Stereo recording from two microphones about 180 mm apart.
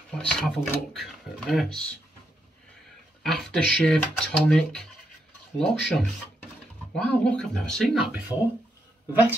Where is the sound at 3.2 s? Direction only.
Centre (ahead or behind).